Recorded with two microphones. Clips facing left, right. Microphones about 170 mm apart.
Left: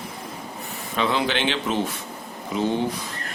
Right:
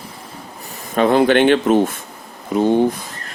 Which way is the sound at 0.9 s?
50° right (ahead or behind).